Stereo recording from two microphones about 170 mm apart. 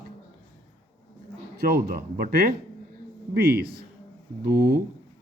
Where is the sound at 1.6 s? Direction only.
65° right (ahead or behind).